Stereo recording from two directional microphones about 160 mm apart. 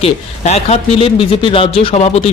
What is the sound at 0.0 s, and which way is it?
Speech, 40° left (ahead or behind).